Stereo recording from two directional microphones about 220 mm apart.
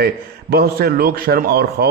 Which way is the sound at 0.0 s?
45° right (ahead or behind).